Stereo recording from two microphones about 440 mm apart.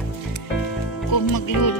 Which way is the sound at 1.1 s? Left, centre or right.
Left.